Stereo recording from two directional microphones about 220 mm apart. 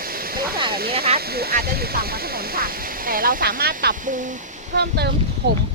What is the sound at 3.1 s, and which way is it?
Speech, 40° right (ahead or behind).